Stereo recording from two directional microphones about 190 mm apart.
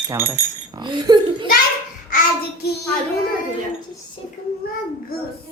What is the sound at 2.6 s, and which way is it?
Speech, 55° left (ahead or behind).